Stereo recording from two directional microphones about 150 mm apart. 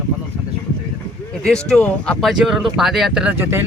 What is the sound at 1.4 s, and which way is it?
Speech, 5° left (ahead or behind).